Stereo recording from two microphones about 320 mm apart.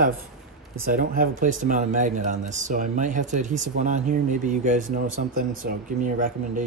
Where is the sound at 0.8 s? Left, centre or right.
Right.